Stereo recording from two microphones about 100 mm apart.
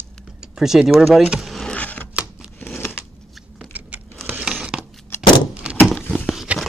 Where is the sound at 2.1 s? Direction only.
10° right (ahead or behind).